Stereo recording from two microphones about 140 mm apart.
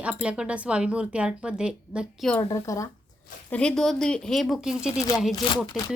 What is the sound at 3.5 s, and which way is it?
Speech, 5° left (ahead or behind).